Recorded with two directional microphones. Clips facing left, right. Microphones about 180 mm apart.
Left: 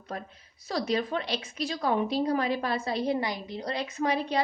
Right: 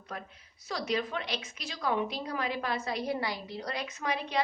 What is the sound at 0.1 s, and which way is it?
A woman's voice, 30° left (ahead or behind).